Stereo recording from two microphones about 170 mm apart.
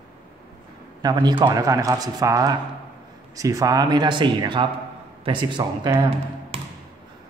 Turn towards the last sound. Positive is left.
turn(degrees=-35)  # may be behind; listen again after turning